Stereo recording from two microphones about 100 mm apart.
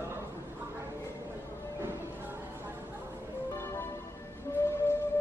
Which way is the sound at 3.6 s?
25° left (ahead or behind).